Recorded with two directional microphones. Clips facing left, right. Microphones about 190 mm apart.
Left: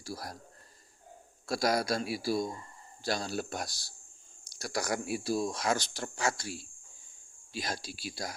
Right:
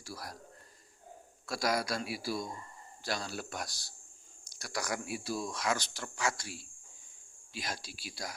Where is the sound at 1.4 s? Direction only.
35° left (ahead or behind).